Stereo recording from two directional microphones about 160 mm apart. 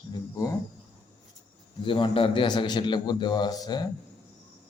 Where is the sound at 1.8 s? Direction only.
30° left (ahead or behind).